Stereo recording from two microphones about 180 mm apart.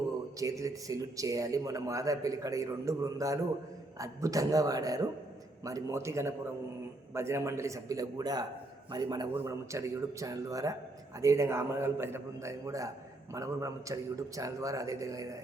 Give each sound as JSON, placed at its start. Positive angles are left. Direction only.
{"t": 0.3, "sound": "a man's voice", "side_deg": -15}